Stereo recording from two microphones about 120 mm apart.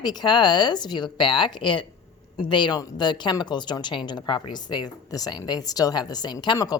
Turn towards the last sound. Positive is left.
turn(degrees=30)  # may be behind; listen again after turning